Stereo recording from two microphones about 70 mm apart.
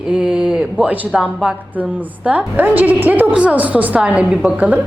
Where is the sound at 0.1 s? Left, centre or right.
Centre.